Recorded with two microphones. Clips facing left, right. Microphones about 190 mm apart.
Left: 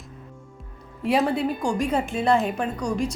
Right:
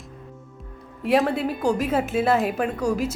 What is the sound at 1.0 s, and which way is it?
A woman's voice, centre (ahead or behind).